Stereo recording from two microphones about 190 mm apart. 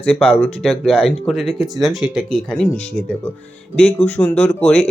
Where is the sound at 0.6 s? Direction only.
Centre (ahead or behind).